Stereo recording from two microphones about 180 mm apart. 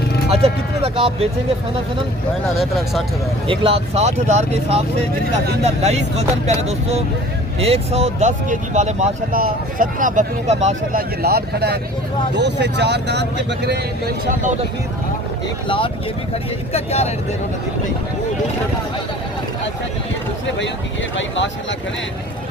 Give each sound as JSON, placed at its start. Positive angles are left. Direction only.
{"t": 0.3, "sound": "speech", "side_deg": -35}
{"t": 2.6, "sound": "speech", "side_deg": 0}
{"t": 3.4, "sound": "speech", "side_deg": -30}
{"t": 10.9, "sound": "speech", "side_deg": -60}
{"t": 16.7, "sound": "speech", "side_deg": 35}
{"t": 21.2, "sound": "speech", "side_deg": 90}